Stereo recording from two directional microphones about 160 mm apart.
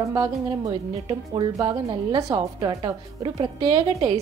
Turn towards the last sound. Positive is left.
turn(degrees=-30)  # may be behind; listen again after turning